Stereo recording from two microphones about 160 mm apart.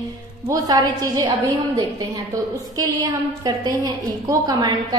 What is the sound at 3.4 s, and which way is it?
A woman's voice, 25° right (ahead or behind).